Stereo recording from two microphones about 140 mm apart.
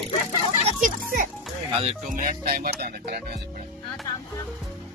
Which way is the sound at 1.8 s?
70° right (ahead or behind).